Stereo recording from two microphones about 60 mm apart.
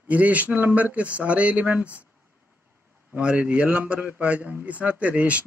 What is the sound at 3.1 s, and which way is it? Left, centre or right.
Speech, centre.